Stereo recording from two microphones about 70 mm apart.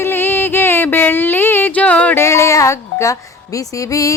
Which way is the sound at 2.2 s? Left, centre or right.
Left.